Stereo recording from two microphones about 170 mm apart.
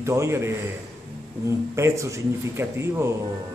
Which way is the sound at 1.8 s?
15° right (ahead or behind).